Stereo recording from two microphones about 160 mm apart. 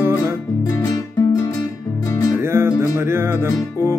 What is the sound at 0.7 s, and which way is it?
Music, 20° left (ahead or behind).